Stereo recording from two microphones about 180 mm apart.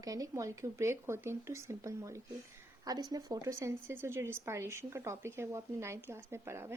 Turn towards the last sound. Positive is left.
turn(degrees=-15)  # may be behind; listen again after turning